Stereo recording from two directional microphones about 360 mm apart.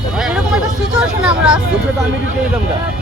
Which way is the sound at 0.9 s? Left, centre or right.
Centre.